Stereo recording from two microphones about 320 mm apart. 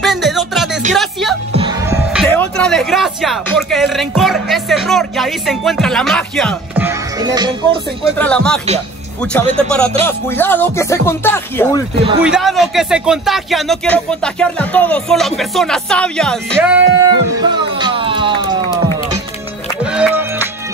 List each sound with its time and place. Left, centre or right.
0.0 s music: centre
0.9 s speech: centre
1.5 s music: centre
2.2 s speech: centre
8.2 s speech: centre
17.4 s music: centre
19.8 s music: centre